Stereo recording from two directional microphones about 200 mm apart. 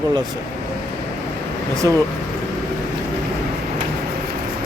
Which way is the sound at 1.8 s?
15° right (ahead or behind).